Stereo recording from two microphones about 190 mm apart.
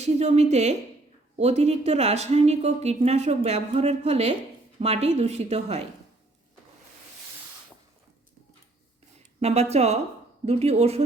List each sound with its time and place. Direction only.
0.0 s a woman's voice: 35° right (ahead or behind)
9.4 s a woman's voice: 35° right (ahead or behind)